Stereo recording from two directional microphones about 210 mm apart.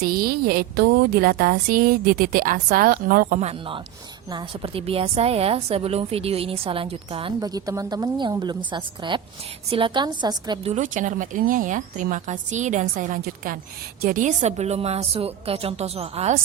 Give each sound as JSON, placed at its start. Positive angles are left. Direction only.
{"t": 0.0, "sound": "a woman's voice", "side_deg": -45}
{"t": 4.3, "sound": "a woman's voice", "side_deg": -25}